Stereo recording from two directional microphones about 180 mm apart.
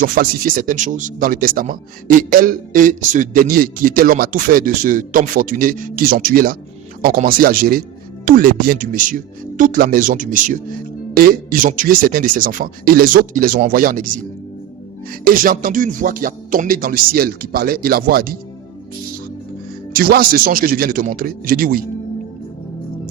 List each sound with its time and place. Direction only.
0.0 s speech: 50° right (ahead or behind)
15.2 s speech: 50° right (ahead or behind)
19.9 s speech: 55° right (ahead or behind)